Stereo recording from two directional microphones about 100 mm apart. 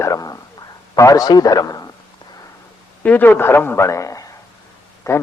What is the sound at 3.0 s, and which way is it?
A man's voice, 15° left (ahead or behind).